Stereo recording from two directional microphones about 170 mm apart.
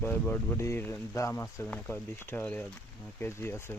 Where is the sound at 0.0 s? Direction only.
10° left (ahead or behind).